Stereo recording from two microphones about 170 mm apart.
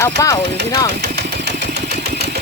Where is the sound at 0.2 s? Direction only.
20° left (ahead or behind).